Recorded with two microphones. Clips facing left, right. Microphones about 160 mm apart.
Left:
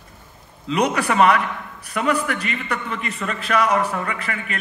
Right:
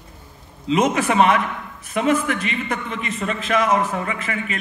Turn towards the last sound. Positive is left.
turn(degrees=40)  # may be behind; listen again after turning